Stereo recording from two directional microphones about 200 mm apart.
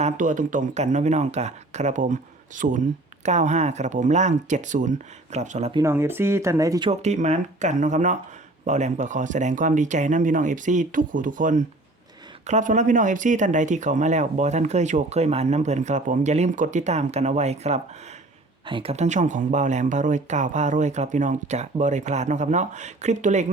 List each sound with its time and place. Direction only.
0.0 s speech: 40° right (ahead or behind)
5.7 s speech: 15° right (ahead or behind); by 23.5 s 35° right (ahead or behind)